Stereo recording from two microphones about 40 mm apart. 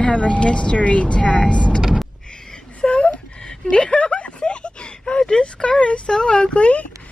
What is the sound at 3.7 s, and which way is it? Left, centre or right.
Speech, left.